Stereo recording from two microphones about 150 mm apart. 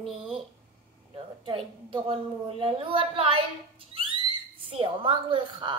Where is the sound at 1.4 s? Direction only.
35° right (ahead or behind).